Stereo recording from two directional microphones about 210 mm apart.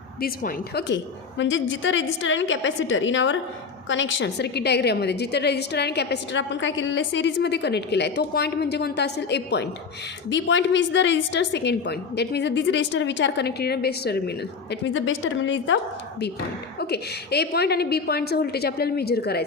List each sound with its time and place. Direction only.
0.2 s a woman's voice: 50° left (ahead or behind)
1.4 s a woman's voice: 60° left (ahead or behind)
16.9 s a woman's voice: 50° left (ahead or behind)